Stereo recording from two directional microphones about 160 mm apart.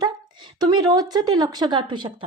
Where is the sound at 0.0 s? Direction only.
30° right (ahead or behind).